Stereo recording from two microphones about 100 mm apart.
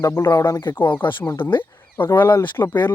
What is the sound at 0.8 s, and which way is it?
Speech, 55° left (ahead or behind).